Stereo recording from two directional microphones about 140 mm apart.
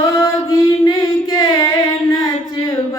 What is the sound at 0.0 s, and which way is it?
Chant, 25° left (ahead or behind).